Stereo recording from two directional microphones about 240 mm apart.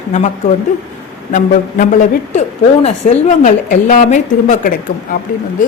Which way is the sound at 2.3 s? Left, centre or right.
Left.